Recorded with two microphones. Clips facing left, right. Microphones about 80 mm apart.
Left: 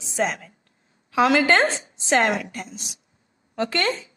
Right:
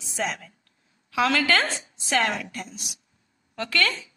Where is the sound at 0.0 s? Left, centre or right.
Left.